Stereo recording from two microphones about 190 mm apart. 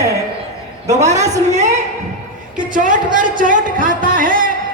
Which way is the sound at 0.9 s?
35° right (ahead or behind).